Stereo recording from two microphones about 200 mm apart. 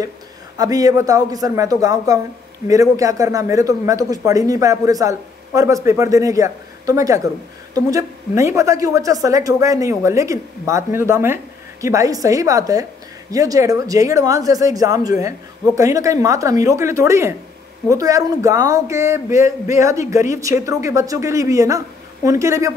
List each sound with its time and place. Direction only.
0.6 s a man's voice: 20° right (ahead or behind)